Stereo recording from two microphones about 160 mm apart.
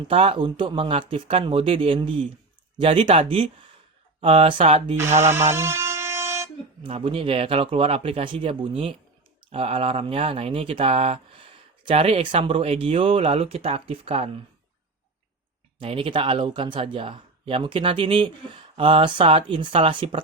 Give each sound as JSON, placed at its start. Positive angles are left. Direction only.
{"t": 0.1, "sound": "speech", "side_deg": -35}
{"t": 5.2, "sound": "a sound", "side_deg": -15}
{"t": 6.8, "sound": "speech", "side_deg": -35}
{"t": 15.8, "sound": "speech", "side_deg": -35}